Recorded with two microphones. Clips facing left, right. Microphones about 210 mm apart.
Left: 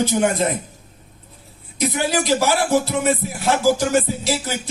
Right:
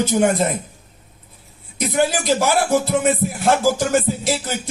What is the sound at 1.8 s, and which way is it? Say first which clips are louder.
Music: right 1 dB; 50° right (ahead or behind).